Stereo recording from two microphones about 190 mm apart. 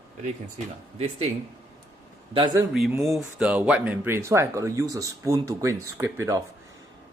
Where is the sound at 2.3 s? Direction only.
25° right (ahead or behind).